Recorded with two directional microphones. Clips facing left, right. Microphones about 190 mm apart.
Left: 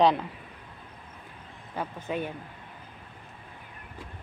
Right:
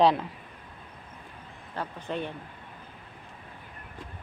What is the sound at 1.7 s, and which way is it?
Speech, 5° left (ahead or behind).